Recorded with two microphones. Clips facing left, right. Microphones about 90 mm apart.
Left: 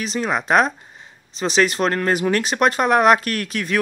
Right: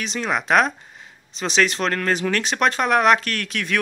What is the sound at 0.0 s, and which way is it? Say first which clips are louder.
Speech: left 2 dB; 5° left (ahead or behind).